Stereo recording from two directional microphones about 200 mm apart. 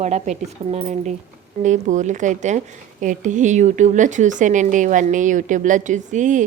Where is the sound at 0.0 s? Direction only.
35° right (ahead or behind).